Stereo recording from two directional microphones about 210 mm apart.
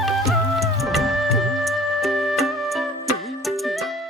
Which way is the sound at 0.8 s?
Centre (ahead or behind).